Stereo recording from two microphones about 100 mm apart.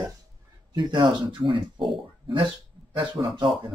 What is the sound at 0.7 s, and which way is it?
Speech, 55° right (ahead or behind).